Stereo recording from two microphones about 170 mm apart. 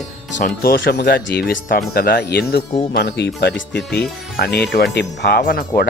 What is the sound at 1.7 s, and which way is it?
Speech, 55° left (ahead or behind).